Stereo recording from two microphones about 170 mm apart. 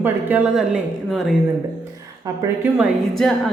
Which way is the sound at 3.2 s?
Centre (ahead or behind).